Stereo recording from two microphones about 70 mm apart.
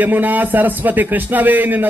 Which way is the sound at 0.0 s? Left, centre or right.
Right.